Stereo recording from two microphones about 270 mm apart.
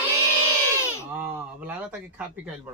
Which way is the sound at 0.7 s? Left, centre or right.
Centre.